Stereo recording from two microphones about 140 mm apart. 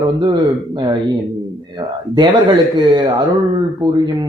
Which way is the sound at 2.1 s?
35° right (ahead or behind).